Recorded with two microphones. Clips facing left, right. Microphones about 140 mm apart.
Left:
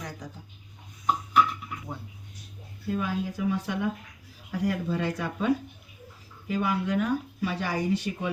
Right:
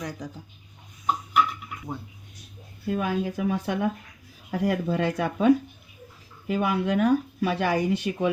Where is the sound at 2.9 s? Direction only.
60° right (ahead or behind).